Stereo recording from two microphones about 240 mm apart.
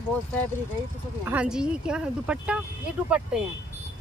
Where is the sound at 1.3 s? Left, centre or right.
Centre.